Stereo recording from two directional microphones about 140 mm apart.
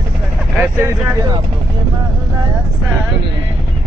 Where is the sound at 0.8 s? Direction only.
15° right (ahead or behind).